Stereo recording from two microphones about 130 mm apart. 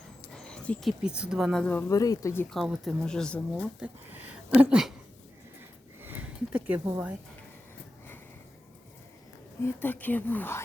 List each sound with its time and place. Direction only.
0.3 s speech: 5° left (ahead or behind)
1.9 s speech: 25° left (ahead or behind)
2.5 s speech: centre (ahead or behind)
3.8 s speech: 15° right (ahead or behind)
6.0 s a sound: 15° right (ahead or behind)
9.6 s speech: 15° left (ahead or behind)